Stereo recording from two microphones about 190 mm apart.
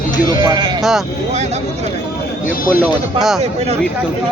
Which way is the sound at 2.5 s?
45° left (ahead or behind).